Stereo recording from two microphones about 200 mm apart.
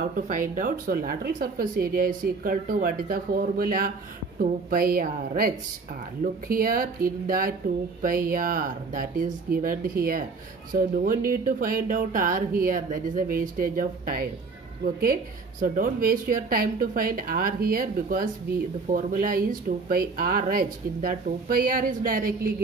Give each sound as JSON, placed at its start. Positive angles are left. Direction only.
{"t": 0.3, "sound": "speech", "side_deg": -40}
{"t": 15.6, "sound": "speech", "side_deg": -45}